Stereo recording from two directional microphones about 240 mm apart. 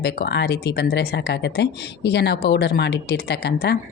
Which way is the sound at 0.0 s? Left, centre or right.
Left.